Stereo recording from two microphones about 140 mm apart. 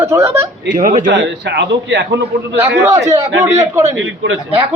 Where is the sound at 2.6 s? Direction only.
20° right (ahead or behind).